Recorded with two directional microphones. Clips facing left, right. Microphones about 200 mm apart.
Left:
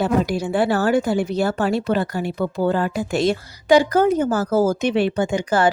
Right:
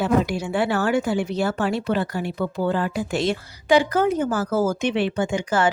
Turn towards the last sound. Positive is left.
turn(degrees=35)  # may be behind; listen again after turning